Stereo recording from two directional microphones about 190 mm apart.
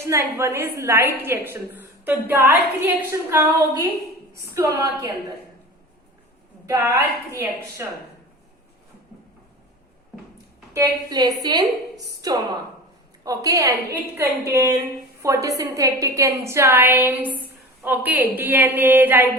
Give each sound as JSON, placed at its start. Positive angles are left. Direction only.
{"t": 0.0, "sound": "a woman's voice", "side_deg": -15}
{"t": 4.4, "sound": "a woman's voice", "side_deg": -15}
{"t": 6.7, "sound": "a woman's voice", "side_deg": -10}
{"t": 10.8, "sound": "a woman's voice", "side_deg": -20}